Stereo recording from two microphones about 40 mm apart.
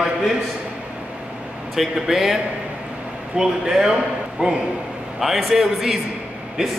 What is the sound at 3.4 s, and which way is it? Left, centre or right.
A man's voice, centre.